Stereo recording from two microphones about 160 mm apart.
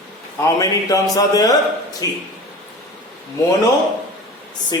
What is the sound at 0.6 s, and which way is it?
Speech, 20° left (ahead or behind).